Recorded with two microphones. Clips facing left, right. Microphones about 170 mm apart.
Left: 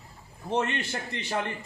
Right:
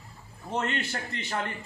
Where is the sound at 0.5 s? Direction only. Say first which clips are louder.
Left 2 dB; 20° left (ahead or behind).